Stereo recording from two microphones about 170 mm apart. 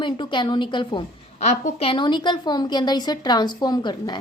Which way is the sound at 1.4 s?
40° left (ahead or behind).